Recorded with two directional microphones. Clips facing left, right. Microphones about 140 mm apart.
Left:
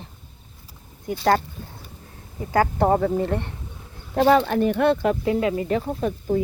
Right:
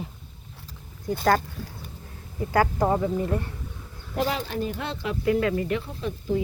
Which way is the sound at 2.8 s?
40° left (ahead or behind).